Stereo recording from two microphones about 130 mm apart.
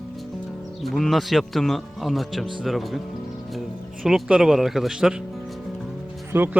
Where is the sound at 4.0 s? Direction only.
Centre (ahead or behind).